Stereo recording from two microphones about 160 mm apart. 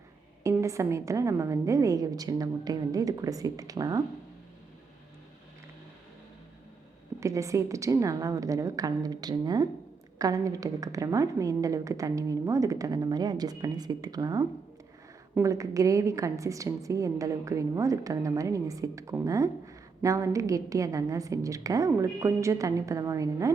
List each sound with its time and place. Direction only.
0.4 s a woman's voice: 20° right (ahead or behind)
7.2 s a woman's voice: 20° right (ahead or behind)